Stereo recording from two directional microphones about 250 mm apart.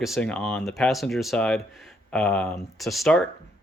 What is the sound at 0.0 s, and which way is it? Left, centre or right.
Speech, centre.